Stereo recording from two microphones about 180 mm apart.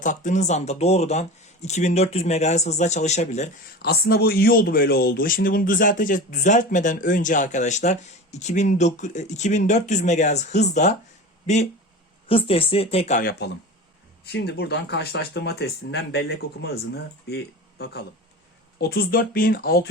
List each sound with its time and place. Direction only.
0.0 s speech: 45° left (ahead or behind)
3.8 s speech: 60° left (ahead or behind); by 13.2 s 35° left (ahead or behind)
14.3 s speech: 65° left (ahead or behind)